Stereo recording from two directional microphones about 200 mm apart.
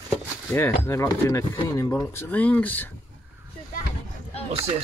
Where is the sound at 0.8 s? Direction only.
15° left (ahead or behind).